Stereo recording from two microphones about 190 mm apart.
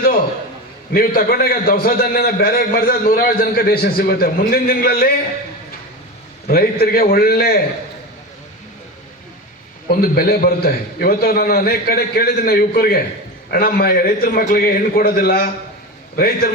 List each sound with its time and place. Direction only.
0.9 s a man's voice: 50° left (ahead or behind)
6.5 s a man's voice: 50° left (ahead or behind)
9.9 s a man's voice: 55° left (ahead or behind)